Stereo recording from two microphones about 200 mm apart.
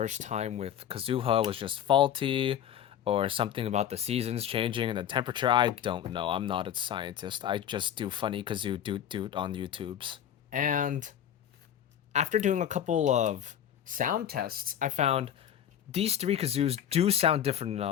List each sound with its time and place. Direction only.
0.0 s speech: 35° right (ahead or behind)
10.5 s speech: 40° right (ahead or behind)
12.1 s speech: 35° right (ahead or behind)